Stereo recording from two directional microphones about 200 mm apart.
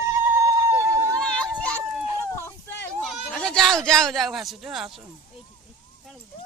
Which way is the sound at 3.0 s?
Centre (ahead or behind).